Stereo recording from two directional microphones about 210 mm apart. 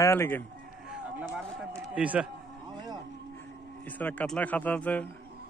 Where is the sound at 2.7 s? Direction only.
20° right (ahead or behind).